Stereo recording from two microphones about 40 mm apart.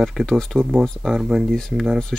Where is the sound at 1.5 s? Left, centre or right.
Centre.